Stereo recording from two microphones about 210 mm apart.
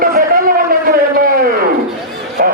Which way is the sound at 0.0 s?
45° right (ahead or behind).